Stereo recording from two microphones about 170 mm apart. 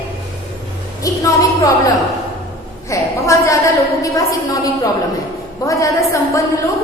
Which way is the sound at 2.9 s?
20° left (ahead or behind).